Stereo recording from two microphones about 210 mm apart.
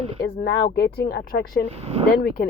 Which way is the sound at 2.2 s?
45° left (ahead or behind).